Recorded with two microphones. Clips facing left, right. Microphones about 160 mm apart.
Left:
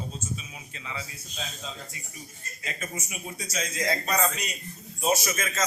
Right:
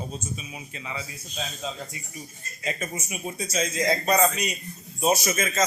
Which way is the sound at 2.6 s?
25° right (ahead or behind).